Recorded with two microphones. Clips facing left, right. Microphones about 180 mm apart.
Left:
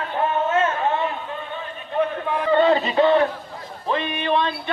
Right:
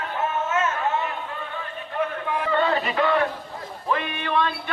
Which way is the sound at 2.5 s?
25° left (ahead or behind).